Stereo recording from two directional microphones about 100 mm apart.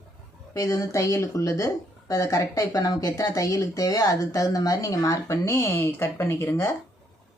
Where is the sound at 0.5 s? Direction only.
35° left (ahead or behind).